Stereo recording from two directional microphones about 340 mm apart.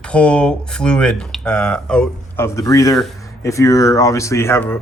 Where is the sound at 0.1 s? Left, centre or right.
Centre.